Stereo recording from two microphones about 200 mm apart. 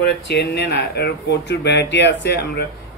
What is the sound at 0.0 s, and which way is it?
Speech, 55° left (ahead or behind).